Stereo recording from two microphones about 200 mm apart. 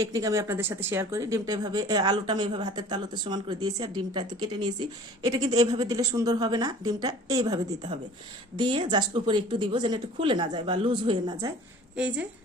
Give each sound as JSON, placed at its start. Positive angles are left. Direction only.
{"t": 0.0, "sound": "speech", "side_deg": -15}
{"t": 11.9, "sound": "a woman's voice", "side_deg": -5}